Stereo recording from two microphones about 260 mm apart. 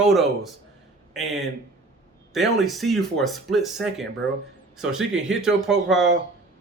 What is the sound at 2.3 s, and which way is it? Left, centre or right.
Speech, centre.